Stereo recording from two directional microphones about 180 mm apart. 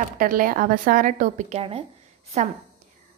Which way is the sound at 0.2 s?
50° right (ahead or behind).